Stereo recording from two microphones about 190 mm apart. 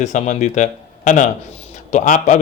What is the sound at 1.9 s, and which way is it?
Speech, 40° left (ahead or behind).